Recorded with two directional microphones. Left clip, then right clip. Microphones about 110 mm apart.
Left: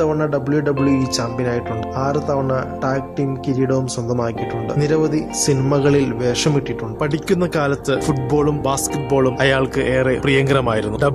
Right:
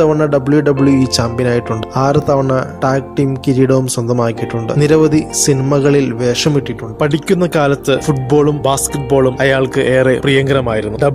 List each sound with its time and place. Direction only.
0.1 s speech: 40° right (ahead or behind)
5.5 s a man's voice: 25° right (ahead or behind)
7.0 s speech: 50° right (ahead or behind)
8.1 s speech: 40° right (ahead or behind)
9.4 s a man's voice: 20° right (ahead or behind)
9.8 s speech: 40° right (ahead or behind)
10.2 s a man's voice: 25° right (ahead or behind)